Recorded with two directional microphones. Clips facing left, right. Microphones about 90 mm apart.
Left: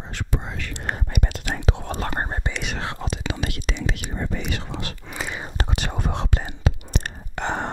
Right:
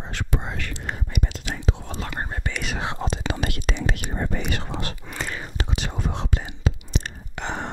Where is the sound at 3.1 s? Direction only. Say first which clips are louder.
Right 1 dB; 45° right (ahead or behind).